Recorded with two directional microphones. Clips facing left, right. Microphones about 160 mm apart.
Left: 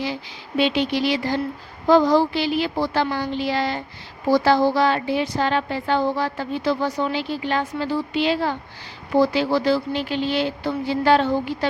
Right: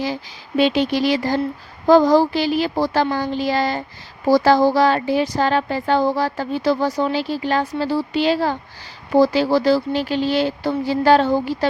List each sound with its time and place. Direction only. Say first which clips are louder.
0.0 s a woman's voice: right 3 dB; 40° right (ahead or behind)